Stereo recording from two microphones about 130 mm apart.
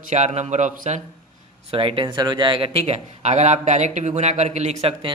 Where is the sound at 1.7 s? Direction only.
45° right (ahead or behind).